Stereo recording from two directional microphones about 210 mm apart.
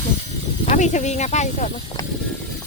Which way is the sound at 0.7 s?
35° left (ahead or behind).